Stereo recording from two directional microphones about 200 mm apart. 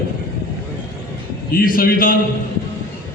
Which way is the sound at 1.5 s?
45° left (ahead or behind).